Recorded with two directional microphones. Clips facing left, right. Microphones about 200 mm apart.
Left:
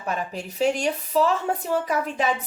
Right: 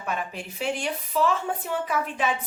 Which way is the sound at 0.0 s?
40° left (ahead or behind).